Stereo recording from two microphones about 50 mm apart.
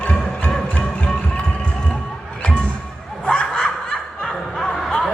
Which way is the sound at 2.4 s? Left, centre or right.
Left.